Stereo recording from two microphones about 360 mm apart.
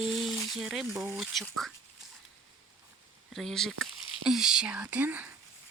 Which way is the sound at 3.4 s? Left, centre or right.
Centre.